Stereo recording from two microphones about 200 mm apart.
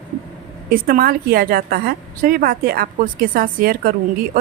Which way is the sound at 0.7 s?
45° right (ahead or behind).